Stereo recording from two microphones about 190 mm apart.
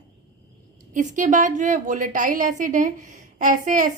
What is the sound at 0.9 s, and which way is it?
A woman's voice, 40° right (ahead or behind).